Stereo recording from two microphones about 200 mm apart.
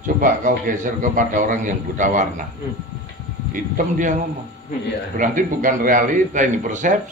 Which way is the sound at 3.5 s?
40° right (ahead or behind).